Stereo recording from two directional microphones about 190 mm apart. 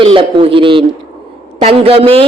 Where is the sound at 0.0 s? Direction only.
30° right (ahead or behind).